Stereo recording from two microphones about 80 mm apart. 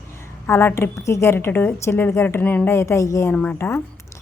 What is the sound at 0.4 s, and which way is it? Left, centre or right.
A woman's voice, left.